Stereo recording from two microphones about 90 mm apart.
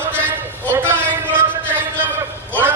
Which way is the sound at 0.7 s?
20° right (ahead or behind).